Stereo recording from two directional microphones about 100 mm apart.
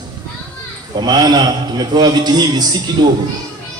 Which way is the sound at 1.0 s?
45° right (ahead or behind).